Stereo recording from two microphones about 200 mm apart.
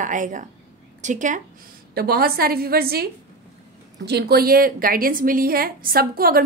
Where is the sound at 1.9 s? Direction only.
50° right (ahead or behind).